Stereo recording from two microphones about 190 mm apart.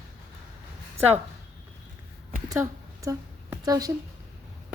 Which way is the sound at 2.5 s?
15° right (ahead or behind).